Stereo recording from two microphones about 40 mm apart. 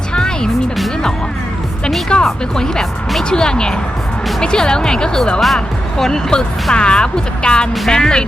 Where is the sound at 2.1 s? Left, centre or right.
Left.